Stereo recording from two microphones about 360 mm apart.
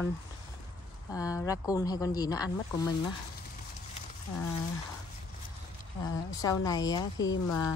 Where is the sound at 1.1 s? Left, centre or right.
Centre.